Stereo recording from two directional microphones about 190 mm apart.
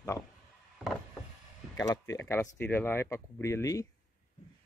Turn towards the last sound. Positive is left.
turn(degrees=15)  # may be behind; listen again after turning